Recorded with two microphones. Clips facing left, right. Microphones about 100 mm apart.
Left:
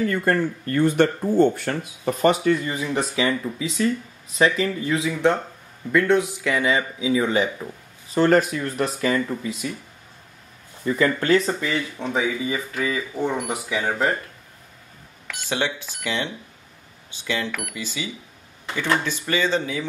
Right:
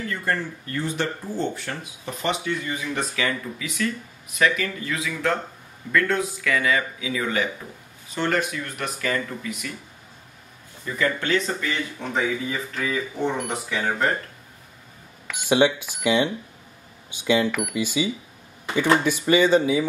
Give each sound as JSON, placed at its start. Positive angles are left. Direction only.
{"t": 0.0, "sound": "speech", "side_deg": 50}
{"t": 8.1, "sound": "speech", "side_deg": 40}
{"t": 11.0, "sound": "speech", "side_deg": 40}
{"t": 12.0, "sound": "speech", "side_deg": 5}
{"t": 15.2, "sound": "speech", "side_deg": -15}